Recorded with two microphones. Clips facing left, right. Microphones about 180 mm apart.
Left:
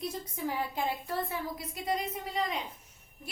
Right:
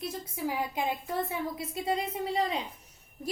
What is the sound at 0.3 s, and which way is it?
A woman's voice, 10° right (ahead or behind).